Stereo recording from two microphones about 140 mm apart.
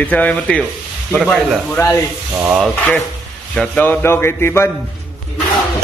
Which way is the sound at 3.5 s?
Centre (ahead or behind).